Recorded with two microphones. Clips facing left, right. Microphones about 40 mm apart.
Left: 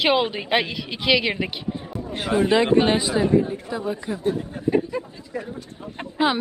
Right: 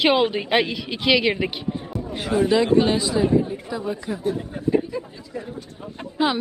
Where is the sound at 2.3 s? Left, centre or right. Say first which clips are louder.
Even; left.